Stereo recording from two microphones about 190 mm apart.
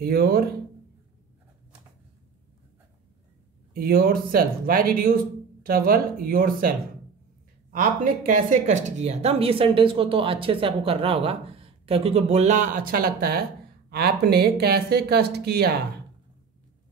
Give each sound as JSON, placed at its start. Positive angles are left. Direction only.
{"t": 0.0, "sound": "speech", "side_deg": -55}
{"t": 3.7, "sound": "speech", "side_deg": -50}
{"t": 7.7, "sound": "speech", "side_deg": -45}